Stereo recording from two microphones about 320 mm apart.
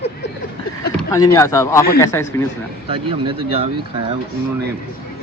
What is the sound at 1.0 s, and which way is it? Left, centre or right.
Vehicle, centre.